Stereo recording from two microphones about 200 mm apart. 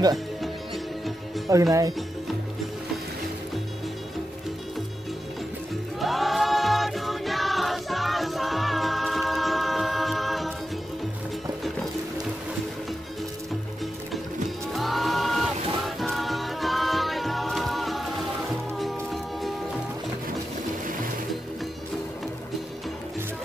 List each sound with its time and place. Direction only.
1.5 s speech: 15° right (ahead or behind)
5.9 s choir: centre (ahead or behind)
14.7 s music: centre (ahead or behind)